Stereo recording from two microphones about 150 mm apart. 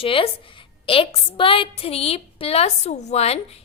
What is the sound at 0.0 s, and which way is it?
A woman's voice, 35° left (ahead or behind).